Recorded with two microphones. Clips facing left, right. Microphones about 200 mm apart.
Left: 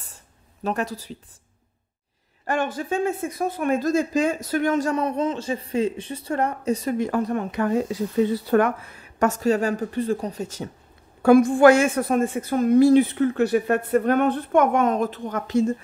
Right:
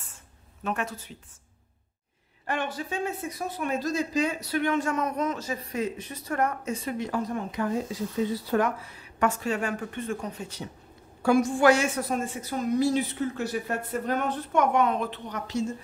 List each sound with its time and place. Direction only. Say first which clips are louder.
0.7 s a woman's voice: left 5 dB; 35° left (ahead or behind)
2.4 s speech: left 6 dB; 45° left (ahead or behind)
11.2 s a woman's voice: left 7 dB; 55° left (ahead or behind)